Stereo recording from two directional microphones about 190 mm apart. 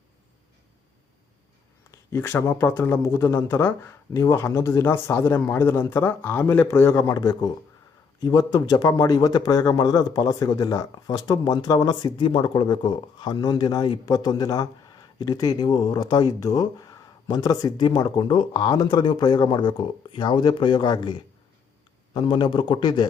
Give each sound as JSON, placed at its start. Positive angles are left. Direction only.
{"t": 1.9, "sound": "a man's voice", "side_deg": 15}